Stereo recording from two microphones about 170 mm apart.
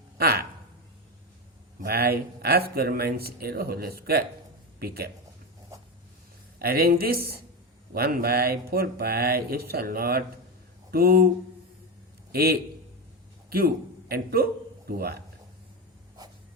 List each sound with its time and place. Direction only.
0.2 s a sound: 65° right (ahead or behind)
1.8 s speech: 65° right (ahead or behind)
6.6 s speech: 60° right (ahead or behind)
12.3 s a man's voice: 65° right (ahead or behind)